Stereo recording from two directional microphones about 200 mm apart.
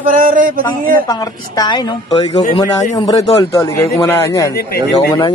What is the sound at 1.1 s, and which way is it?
Speech, 20° left (ahead or behind).